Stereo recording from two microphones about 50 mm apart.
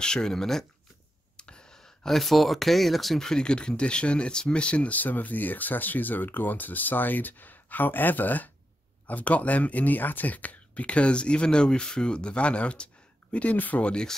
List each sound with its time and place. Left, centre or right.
0.0 s speech: centre
1.3 s a sound: centre
2.0 s speech: centre; by 13.8 s left
13.8 s speech: centre